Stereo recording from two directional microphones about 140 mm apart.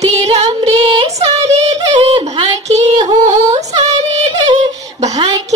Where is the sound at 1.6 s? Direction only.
45° right (ahead or behind).